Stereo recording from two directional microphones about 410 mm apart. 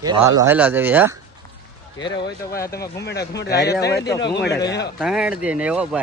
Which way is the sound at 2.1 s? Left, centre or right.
Left.